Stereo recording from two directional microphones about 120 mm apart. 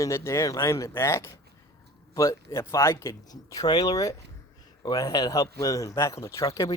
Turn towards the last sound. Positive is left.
turn(degrees=30)  # may be behind; listen again after turning